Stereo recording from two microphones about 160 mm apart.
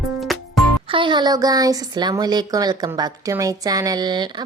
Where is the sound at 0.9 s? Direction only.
30° right (ahead or behind).